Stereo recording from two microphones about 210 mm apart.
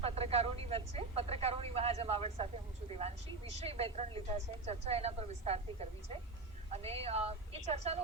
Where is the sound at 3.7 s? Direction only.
30° right (ahead or behind).